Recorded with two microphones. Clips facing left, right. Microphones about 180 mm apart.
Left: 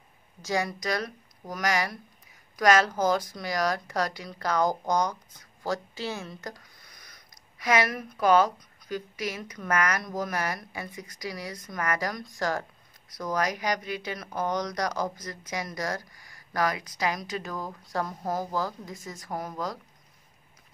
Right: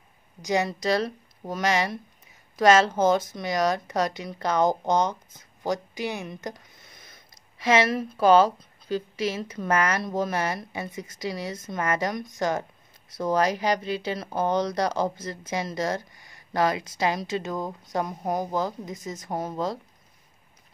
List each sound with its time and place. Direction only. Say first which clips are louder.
0.4 s speech: right 4 dB; 20° right (ahead or behind)